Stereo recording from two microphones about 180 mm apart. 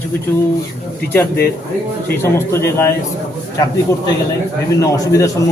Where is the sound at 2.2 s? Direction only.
15° left (ahead or behind).